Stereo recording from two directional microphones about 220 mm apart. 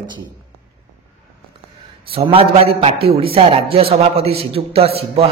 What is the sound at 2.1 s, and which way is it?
A man's voice, 25° right (ahead or behind).